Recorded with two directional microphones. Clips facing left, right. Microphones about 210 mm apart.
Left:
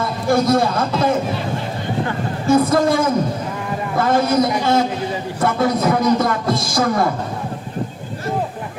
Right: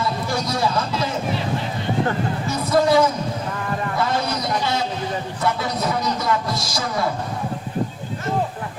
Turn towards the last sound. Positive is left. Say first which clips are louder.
# left 6 dB
turn(degrees=50)  # may be behind; listen again after turning